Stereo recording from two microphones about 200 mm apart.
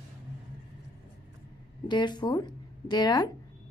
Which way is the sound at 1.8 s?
20° left (ahead or behind).